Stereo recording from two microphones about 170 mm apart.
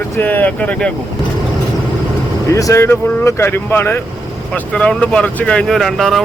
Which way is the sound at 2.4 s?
20° left (ahead or behind).